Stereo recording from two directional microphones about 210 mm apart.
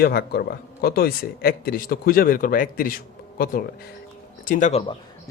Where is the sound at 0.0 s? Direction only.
50° left (ahead or behind).